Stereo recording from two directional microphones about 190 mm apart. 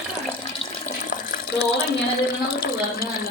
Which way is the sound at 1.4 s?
55° left (ahead or behind).